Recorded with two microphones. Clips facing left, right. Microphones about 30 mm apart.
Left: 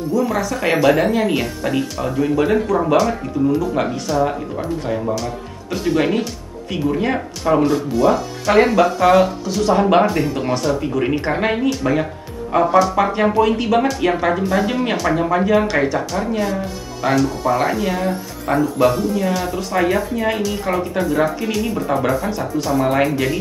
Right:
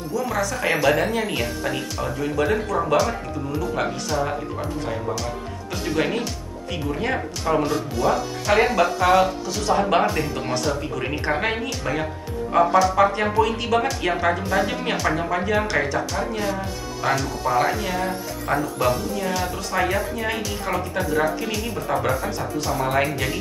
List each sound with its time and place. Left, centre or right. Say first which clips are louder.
0.1 s speech: left 4 dB; centre
3.0 s speech: left 6 dB; centre
13.8 s speech: left 4 dB; centre